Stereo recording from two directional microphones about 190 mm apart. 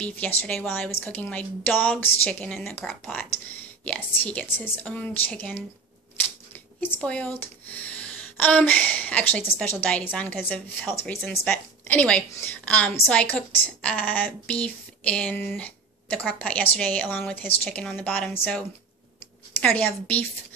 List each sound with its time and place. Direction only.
0.0 s a woman's voice: 10° left (ahead or behind)
7.0 s a woman's voice: 5° left (ahead or behind)
19.6 s a woman's voice: 10° left (ahead or behind)